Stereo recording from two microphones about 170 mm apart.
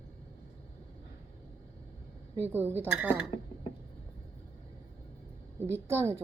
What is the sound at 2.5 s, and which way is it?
Speech, 10° right (ahead or behind).